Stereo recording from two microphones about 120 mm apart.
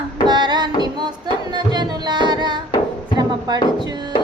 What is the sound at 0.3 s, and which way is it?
Music, 35° right (ahead or behind).